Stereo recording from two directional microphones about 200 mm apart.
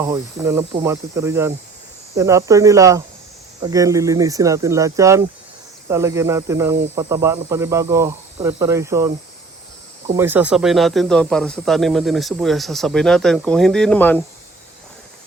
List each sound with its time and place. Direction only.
0.0 s speech: 15° right (ahead or behind)
10.2 s speech: 10° right (ahead or behind); by 14.2 s 5° left (ahead or behind)